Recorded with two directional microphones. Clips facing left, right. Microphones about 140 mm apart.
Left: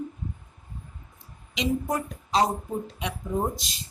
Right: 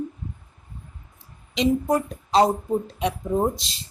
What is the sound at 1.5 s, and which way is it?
Speech, 30° right (ahead or behind).